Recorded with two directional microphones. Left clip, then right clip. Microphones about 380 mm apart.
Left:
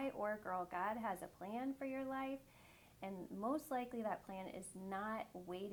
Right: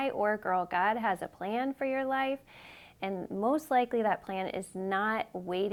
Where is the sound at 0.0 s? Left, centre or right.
Right.